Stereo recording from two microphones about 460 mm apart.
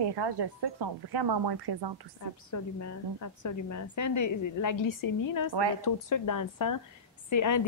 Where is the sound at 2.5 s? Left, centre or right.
Left.